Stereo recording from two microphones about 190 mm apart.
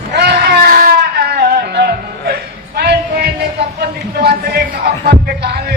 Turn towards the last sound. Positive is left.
turn(degrees=-55)  # may be behind; listen again after turning